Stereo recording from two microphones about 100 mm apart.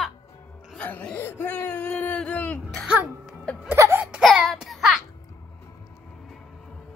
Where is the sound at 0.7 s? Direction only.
15° left (ahead or behind).